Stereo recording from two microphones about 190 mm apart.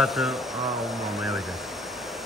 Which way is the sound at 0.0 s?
Centre (ahead or behind).